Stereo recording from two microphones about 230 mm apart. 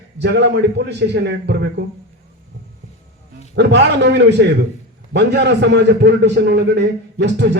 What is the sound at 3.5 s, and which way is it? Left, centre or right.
A man's voice, right.